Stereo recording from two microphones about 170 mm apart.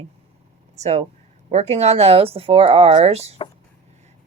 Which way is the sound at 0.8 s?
40° right (ahead or behind).